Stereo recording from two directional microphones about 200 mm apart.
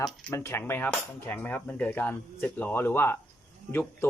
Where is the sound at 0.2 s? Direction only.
10° left (ahead or behind).